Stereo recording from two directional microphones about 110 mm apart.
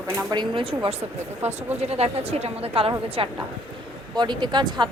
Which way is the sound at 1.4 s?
70° right (ahead or behind).